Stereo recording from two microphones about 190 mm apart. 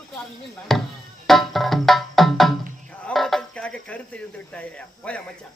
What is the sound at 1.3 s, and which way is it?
Music, centre (ahead or behind).